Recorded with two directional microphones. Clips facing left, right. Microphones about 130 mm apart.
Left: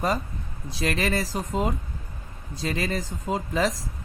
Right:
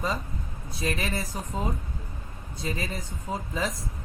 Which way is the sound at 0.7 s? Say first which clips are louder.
Left 4 dB; 85° left.